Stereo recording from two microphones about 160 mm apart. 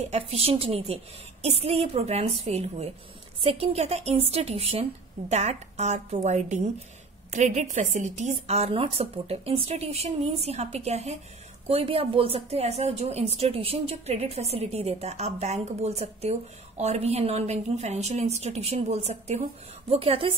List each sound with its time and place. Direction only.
0.1 s a woman's voice: 40° right (ahead or behind)